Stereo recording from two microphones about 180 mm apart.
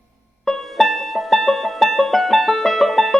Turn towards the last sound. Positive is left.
turn(degrees=0)  # may be behind; listen again after turning